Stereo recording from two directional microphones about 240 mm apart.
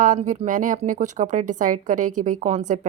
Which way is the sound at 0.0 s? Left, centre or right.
Right.